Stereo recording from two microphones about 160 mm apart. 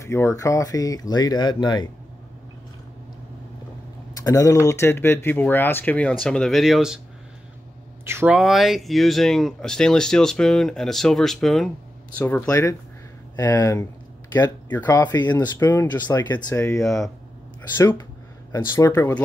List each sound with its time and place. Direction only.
0.0 s speech: 15° left (ahead or behind)
4.1 s speech: 20° left (ahead or behind); by 7.0 s centre (ahead or behind)
8.0 s speech: 15° right (ahead or behind)
8.4 s speech: centre (ahead or behind)
12.2 s speech: 15° left (ahead or behind)